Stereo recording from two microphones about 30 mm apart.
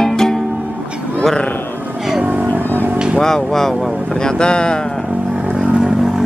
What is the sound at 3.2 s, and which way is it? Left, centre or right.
Music, centre.